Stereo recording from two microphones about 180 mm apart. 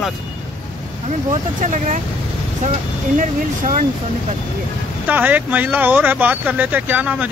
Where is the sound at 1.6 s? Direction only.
45° right (ahead or behind).